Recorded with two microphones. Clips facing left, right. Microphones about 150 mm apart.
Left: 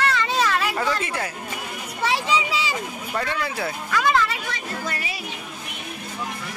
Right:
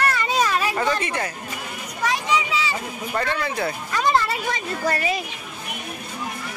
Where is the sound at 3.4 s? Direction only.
5° left (ahead or behind).